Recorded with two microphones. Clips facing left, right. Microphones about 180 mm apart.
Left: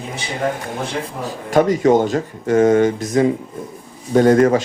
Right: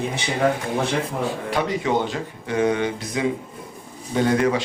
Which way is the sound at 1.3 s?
45° left (ahead or behind).